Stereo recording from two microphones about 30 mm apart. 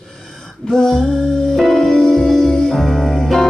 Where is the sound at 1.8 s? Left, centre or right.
Left.